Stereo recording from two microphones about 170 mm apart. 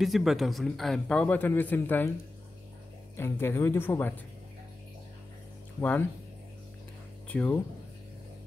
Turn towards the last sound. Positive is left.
turn(degrees=10)  # may be behind; listen again after turning